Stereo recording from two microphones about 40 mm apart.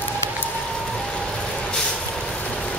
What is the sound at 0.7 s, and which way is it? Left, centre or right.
Vehicle, centre.